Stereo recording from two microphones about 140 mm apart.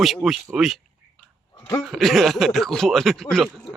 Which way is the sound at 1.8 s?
Centre (ahead or behind).